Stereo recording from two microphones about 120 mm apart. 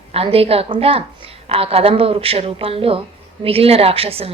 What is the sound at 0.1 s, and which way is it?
A woman's voice, 55° right (ahead or behind).